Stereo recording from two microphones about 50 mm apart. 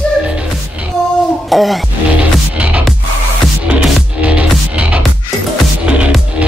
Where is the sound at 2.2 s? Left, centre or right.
Right.